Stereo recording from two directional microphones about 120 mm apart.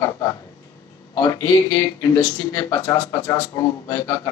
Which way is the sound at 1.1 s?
30° left (ahead or behind).